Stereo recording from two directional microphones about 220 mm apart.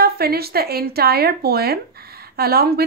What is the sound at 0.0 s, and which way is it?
A woman's voice, 45° right (ahead or behind).